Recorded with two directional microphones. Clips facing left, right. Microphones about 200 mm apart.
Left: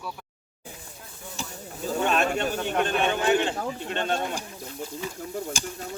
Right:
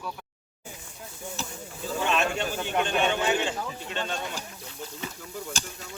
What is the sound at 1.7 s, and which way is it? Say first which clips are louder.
Snake: left 3 dB; 40° left (ahead or behind).